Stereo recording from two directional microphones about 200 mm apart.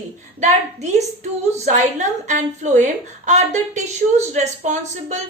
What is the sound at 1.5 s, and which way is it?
Speech, 35° right (ahead or behind).